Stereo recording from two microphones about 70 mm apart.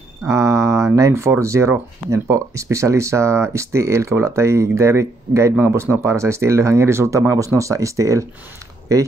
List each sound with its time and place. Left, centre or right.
0.3 s speech: right